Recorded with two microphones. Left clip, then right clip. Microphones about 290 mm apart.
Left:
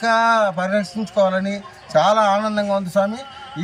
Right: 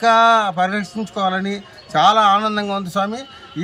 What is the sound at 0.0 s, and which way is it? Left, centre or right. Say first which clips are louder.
A man's voice: right 3 dB; centre.